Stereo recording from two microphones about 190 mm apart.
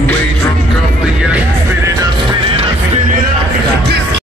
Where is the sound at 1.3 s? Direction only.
15° right (ahead or behind).